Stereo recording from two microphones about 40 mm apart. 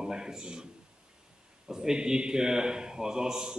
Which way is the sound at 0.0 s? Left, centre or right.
Centre.